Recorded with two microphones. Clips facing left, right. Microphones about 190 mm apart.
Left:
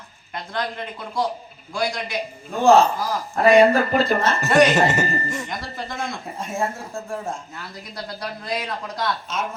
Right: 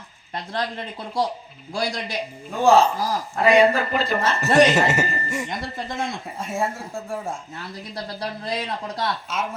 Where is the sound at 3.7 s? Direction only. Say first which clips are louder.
Left 4 dB; 50° left (ahead or behind).